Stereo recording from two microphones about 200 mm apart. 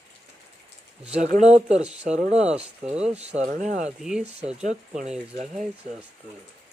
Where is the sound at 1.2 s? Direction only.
35° right (ahead or behind).